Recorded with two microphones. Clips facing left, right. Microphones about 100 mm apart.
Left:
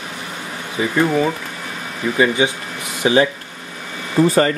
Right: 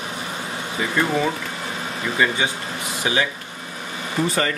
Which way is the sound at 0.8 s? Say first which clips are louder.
Left 5 dB; 20° left (ahead or behind).